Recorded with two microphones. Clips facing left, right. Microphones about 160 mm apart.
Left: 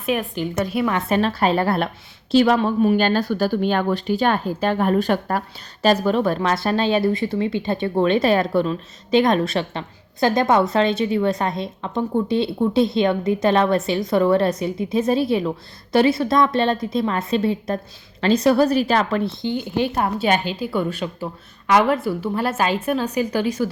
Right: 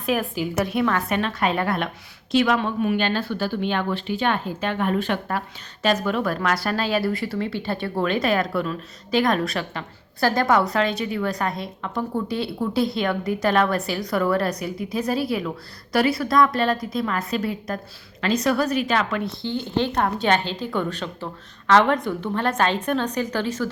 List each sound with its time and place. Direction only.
0.0 s a woman's voice: centre (ahead or behind)
0.9 s speech: 25° left (ahead or behind)
19.4 s a woman's voice: 15° left (ahead or behind)